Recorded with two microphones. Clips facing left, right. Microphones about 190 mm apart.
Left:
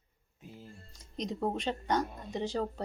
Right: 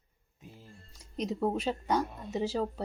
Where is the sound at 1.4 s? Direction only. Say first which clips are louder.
Right 2 dB; centre (ahead or behind).